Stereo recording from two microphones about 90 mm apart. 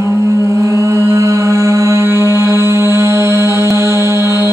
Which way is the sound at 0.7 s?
35° right (ahead or behind).